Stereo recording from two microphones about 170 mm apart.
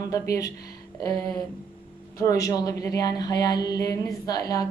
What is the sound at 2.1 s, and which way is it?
A woman's voice, 20° left (ahead or behind).